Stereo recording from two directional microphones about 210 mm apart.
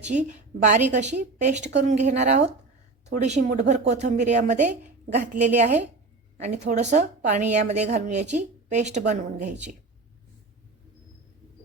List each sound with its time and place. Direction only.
0.1 s a woman's voice: 35° right (ahead or behind)